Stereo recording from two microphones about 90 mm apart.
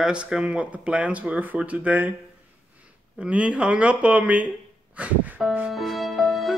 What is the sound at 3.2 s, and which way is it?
Speech, 15° right (ahead or behind).